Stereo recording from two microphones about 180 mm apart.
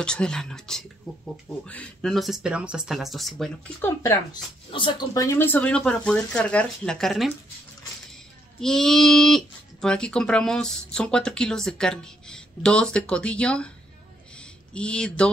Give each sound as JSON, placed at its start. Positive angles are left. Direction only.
{"t": 0.0, "sound": "speech", "side_deg": 5}
{"t": 4.0, "sound": "speech", "side_deg": 15}
{"t": 4.6, "sound": "speech", "side_deg": 25}
{"t": 8.5, "sound": "speech", "side_deg": 5}
{"t": 14.7, "sound": "speech", "side_deg": 5}